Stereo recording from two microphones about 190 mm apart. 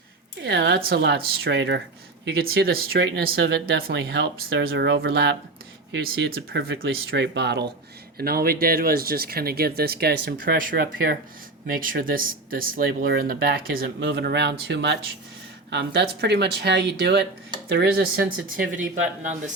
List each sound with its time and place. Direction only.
0.4 s speech: 65° right (ahead or behind)
2.2 s speech: 55° right (ahead or behind)
8.2 s speech: 50° right (ahead or behind)